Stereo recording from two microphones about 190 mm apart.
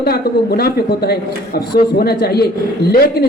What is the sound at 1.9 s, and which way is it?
Speech, 55° left (ahead or behind).